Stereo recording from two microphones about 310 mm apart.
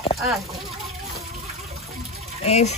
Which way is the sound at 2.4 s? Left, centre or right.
Centre.